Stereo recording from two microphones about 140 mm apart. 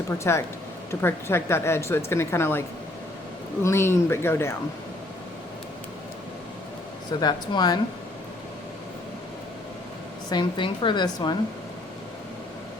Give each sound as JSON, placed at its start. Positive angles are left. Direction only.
{"t": 0.1, "sound": "speech", "side_deg": 20}
{"t": 7.2, "sound": "speech", "side_deg": 30}
{"t": 10.2, "sound": "speech", "side_deg": 35}